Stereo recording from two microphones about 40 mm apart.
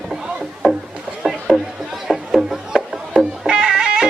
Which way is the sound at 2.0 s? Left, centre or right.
Centre.